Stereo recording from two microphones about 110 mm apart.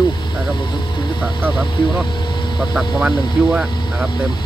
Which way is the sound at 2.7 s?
10° right (ahead or behind).